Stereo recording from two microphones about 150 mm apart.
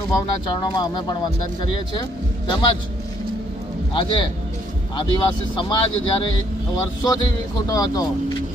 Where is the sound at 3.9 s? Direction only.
35° left (ahead or behind).